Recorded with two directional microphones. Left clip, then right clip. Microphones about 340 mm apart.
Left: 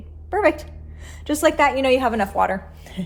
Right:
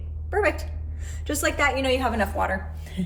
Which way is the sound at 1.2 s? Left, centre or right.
Left.